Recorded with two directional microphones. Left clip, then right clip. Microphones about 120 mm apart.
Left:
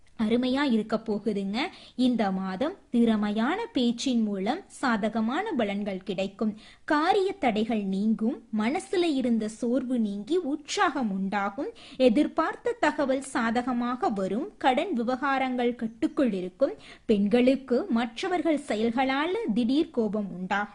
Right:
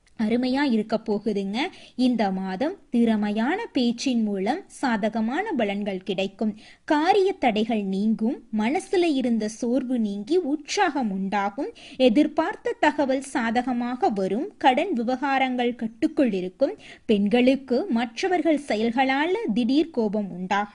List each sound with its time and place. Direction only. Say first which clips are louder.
0.2 s a woman's voice: right 2 dB; 10° right (ahead or behind)